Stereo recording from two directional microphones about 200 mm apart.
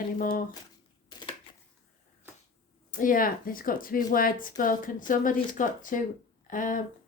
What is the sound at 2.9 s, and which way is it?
Speech, 40° left (ahead or behind).